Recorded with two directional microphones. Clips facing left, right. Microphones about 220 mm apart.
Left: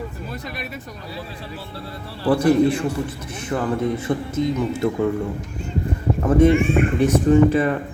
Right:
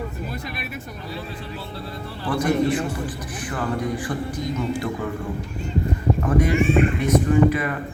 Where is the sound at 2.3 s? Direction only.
30° left (ahead or behind).